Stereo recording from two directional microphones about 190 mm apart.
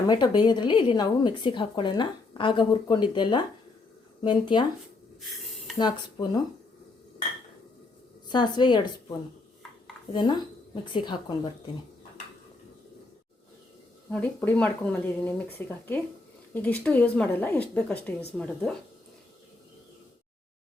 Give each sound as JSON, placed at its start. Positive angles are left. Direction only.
{"t": 0.1, "sound": "a woman's voice", "side_deg": 20}
{"t": 5.2, "sound": "a sound", "side_deg": 0}
{"t": 5.7, "sound": "a woman's voice", "side_deg": 20}
{"t": 8.3, "sound": "a woman's voice", "side_deg": 25}
{"t": 14.1, "sound": "speech", "side_deg": 10}